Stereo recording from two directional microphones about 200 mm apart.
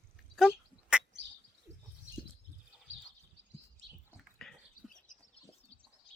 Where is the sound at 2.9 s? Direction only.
75° right (ahead or behind).